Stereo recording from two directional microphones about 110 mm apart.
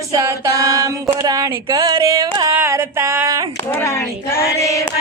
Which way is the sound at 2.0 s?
30° right (ahead or behind).